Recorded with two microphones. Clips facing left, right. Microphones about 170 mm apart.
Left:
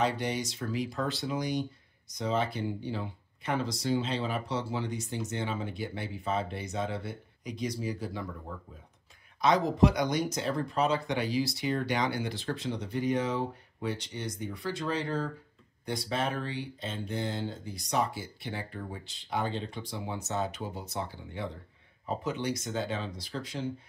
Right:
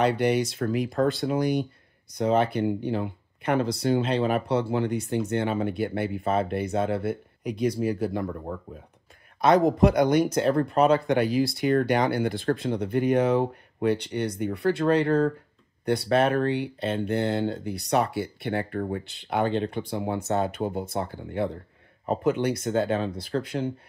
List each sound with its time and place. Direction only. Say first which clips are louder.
0.0 s speech: right 8 dB; 65° right (ahead or behind)